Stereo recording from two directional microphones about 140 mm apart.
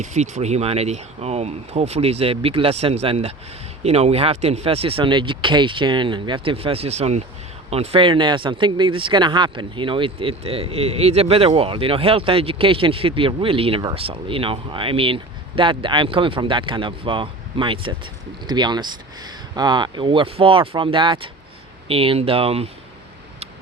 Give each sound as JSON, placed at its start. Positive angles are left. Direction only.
{"t": 0.0, "sound": "speech", "side_deg": -55}